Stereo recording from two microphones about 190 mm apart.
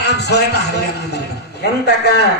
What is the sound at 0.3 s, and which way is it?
Speech, 60° left (ahead or behind).